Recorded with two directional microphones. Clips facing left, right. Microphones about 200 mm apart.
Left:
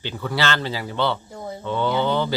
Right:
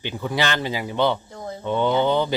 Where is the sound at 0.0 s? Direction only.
15° right (ahead or behind).